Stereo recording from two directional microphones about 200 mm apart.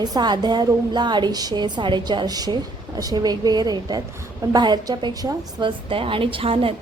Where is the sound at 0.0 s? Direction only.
20° right (ahead or behind).